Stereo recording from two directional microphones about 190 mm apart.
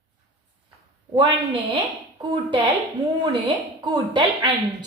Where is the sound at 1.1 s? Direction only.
25° right (ahead or behind).